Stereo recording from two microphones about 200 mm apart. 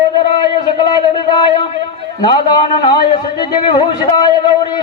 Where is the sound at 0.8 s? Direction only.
25° left (ahead or behind).